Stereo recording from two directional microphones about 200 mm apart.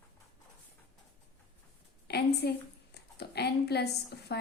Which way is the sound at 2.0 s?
55° left (ahead or behind).